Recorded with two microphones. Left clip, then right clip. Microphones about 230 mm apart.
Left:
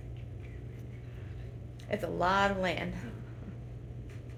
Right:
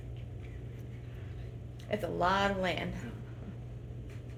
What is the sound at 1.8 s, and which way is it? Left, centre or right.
Speech, left.